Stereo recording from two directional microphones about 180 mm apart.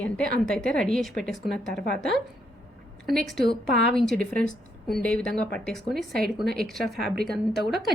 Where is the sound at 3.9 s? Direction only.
Centre (ahead or behind).